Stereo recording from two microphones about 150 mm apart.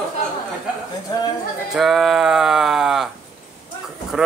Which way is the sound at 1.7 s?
Centre (ahead or behind).